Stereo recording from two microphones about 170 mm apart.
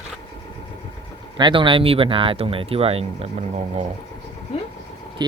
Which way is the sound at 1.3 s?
25° right (ahead or behind).